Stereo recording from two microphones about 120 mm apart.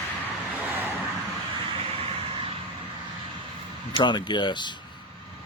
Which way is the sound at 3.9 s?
40° left (ahead or behind).